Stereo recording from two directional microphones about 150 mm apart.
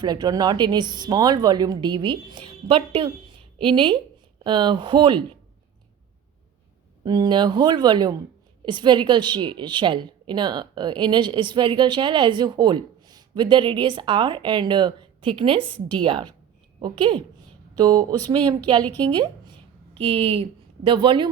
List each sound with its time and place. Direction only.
0.0 s a woman's voice: 25° right (ahead or behind)
7.0 s a woman's voice: 30° right (ahead or behind)